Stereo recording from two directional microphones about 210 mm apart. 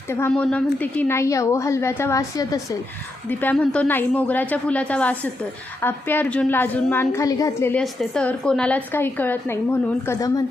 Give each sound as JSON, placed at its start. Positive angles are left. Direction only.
{"t": 0.1, "sound": "a woman's voice", "side_deg": 10}